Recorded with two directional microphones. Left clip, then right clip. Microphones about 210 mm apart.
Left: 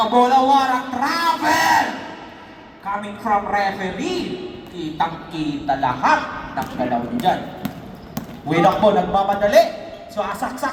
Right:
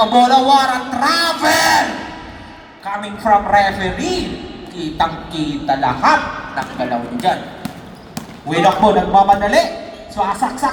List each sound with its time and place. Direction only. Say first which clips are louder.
0.1 s a sound: right 4 dB; 35° right (ahead or behind)
2.8 s a woman's voice: right 5 dB; 35° right (ahead or behind)
5.8 s speech: right 4 dB; 15° right (ahead or behind)
6.7 s a man's voice: even; 5° right (ahead or behind)
8.4 s a man's voice: right 3 dB; 10° left (ahead or behind)